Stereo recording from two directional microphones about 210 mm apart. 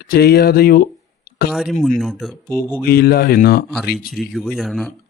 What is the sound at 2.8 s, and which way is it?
Speech, 45° left (ahead or behind).